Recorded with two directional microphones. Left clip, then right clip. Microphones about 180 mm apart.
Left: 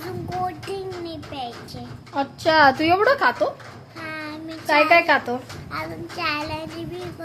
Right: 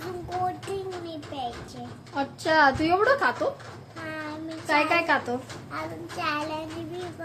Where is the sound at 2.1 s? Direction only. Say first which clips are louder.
Left 5 dB; 30° left (ahead or behind).